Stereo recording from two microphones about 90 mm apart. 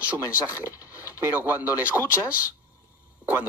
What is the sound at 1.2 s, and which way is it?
Speech, 25° right (ahead or behind).